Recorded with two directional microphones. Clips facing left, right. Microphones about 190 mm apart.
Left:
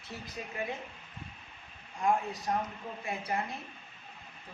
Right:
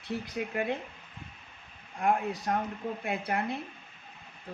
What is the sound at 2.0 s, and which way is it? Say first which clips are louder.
Speech: right 2 dB; 60° right (ahead or behind).